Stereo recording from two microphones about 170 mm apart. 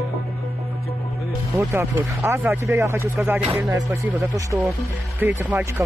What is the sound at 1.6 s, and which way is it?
Speech, 15° right (ahead or behind).